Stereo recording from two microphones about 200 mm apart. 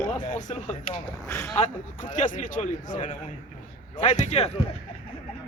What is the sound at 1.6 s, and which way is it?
A man's voice, 40° left (ahead or behind).